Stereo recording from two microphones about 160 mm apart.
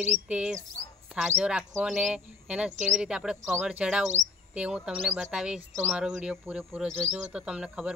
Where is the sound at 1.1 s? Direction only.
5° right (ahead or behind).